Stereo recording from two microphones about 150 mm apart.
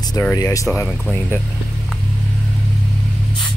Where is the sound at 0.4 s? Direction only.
20° left (ahead or behind).